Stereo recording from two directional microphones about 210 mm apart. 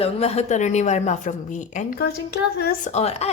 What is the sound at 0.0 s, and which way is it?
A woman's voice, 30° left (ahead or behind).